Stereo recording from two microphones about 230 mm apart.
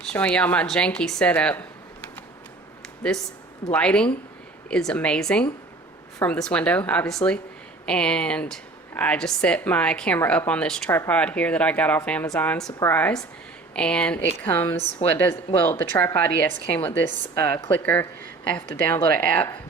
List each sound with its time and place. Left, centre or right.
0.1 s a woman's voice: centre
2.8 s a sound: centre
3.7 s a woman's voice: centre